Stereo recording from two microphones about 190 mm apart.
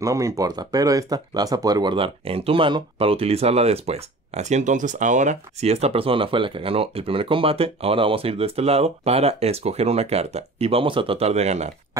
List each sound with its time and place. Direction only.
0.0 s speech: 15° right (ahead or behind); by 11.7 s 35° right (ahead or behind)